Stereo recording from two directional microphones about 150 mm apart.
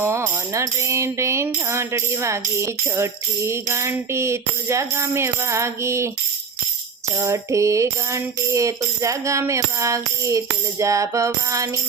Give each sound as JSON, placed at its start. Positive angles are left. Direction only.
{"t": 0.0, "sound": "speech", "side_deg": -15}
{"t": 7.2, "sound": "speech", "side_deg": -20}